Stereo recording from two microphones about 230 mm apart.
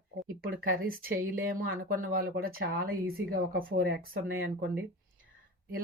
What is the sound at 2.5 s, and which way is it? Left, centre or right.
Speech, right.